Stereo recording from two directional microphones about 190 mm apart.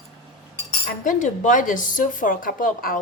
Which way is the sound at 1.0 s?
40° left (ahead or behind).